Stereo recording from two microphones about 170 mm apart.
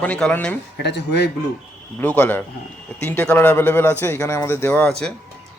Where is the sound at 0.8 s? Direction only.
85° left.